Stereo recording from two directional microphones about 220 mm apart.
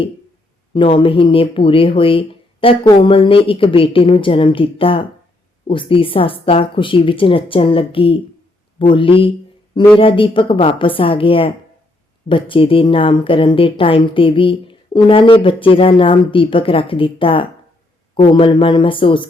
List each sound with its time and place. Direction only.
0.7 s speech: 20° left (ahead or behind)